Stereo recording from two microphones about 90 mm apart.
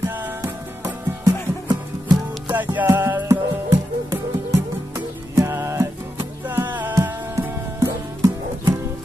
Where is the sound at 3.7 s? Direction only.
40° right (ahead or behind).